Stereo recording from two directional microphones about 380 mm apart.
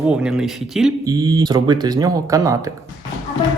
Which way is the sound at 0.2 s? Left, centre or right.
Centre.